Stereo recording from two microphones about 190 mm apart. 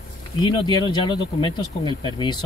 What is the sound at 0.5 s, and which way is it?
Speech, 25° left (ahead or behind).